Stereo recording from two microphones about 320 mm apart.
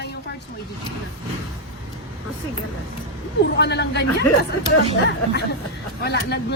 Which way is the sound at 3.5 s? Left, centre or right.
Left.